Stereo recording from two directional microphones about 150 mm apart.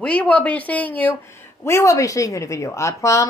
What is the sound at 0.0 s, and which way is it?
Speech, 10° left (ahead or behind).